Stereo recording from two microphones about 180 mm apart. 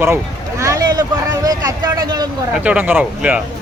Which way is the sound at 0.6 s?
20° right (ahead or behind).